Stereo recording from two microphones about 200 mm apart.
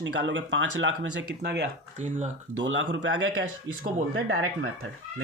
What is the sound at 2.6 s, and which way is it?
Speech, 70° right (ahead or behind).